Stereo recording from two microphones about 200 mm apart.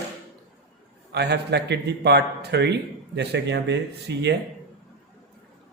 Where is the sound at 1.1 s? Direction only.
55° right (ahead or behind).